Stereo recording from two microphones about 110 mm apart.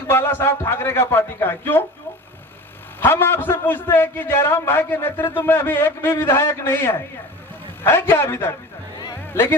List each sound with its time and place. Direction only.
0.1 s a man's voice: 20° left (ahead or behind)
3.0 s a man's voice: 20° left (ahead or behind)